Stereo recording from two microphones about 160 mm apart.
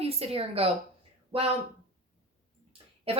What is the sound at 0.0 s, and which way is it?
Speech, 40° right (ahead or behind).